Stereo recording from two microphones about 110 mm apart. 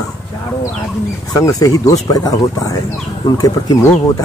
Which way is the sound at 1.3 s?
35° left (ahead or behind).